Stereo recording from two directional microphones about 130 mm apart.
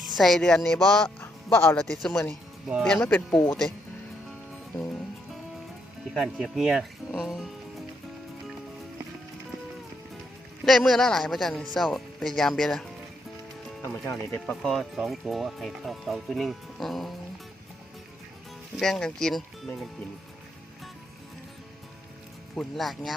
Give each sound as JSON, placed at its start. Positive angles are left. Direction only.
{"t": 0.2, "sound": "speech", "side_deg": 5}
{"t": 1.2, "sound": "music", "side_deg": 20}
{"t": 1.7, "sound": "speech", "side_deg": 5}
{"t": 2.9, "sound": "speech", "side_deg": 10}
{"t": 6.1, "sound": "speech", "side_deg": 0}
{"t": 10.7, "sound": "speech", "side_deg": 0}
{"t": 13.8, "sound": "speech", "side_deg": 20}
{"t": 14.4, "sound": "speech", "side_deg": 5}
{"t": 18.8, "sound": "speech", "side_deg": 5}
{"t": 22.5, "sound": "speech", "side_deg": 0}